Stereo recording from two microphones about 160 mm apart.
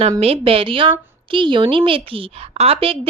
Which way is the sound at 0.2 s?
35° right (ahead or behind).